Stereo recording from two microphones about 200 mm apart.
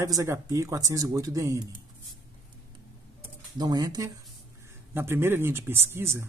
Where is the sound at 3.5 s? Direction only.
20° right (ahead or behind).